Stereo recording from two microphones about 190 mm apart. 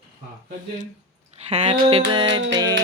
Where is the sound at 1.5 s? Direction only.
35° right (ahead or behind).